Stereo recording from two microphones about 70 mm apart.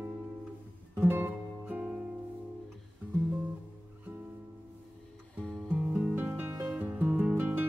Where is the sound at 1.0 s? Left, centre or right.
Right.